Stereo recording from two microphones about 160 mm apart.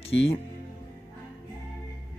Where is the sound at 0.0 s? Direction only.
35° left (ahead or behind).